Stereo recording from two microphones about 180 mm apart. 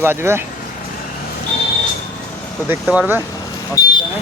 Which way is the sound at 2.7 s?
10° right (ahead or behind).